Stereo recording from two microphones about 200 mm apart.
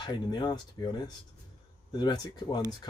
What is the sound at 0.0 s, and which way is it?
Speech, 20° left (ahead or behind).